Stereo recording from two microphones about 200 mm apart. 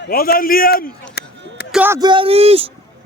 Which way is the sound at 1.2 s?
55° left (ahead or behind).